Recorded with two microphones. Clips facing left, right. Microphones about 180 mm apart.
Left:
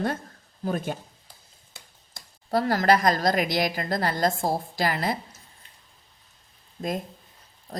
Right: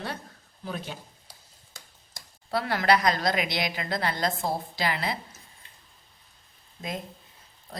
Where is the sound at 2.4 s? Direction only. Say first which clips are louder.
Left 3 dB; 40° left (ahead or behind).